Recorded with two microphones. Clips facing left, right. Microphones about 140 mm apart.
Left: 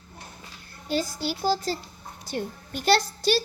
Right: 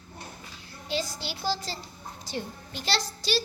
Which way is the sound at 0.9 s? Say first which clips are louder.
Left 5 dB; 45° left (ahead or behind).